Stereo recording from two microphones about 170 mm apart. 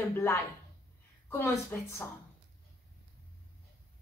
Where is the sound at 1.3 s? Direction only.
15° left (ahead or behind).